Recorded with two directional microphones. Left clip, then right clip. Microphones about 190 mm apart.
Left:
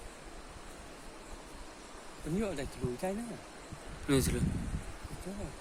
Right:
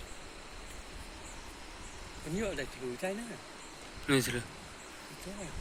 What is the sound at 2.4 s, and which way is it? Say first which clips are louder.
Stream: right 1 dB; 55° left (ahead or behind).